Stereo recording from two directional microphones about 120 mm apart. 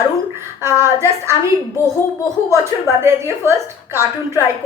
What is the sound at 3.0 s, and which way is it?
Speech, 20° right (ahead or behind).